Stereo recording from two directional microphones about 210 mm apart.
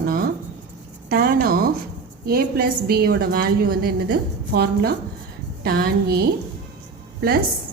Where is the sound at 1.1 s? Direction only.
45° right (ahead or behind).